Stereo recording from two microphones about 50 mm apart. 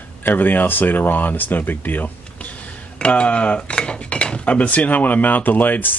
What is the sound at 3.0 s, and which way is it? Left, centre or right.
Speech, left.